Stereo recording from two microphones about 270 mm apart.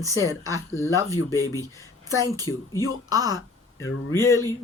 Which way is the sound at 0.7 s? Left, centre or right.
Centre.